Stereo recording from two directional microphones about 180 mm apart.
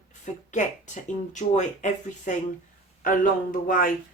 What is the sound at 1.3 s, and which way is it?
Speech, 40° left (ahead or behind).